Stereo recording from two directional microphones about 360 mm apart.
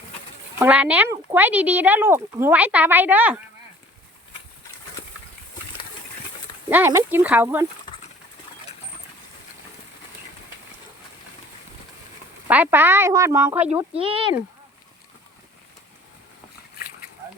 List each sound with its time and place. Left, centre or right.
0.6 s speech: centre
6.7 s speech: centre
12.5 s speech: centre